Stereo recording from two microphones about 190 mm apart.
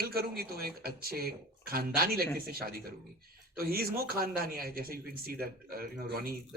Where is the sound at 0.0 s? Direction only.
55° right (ahead or behind).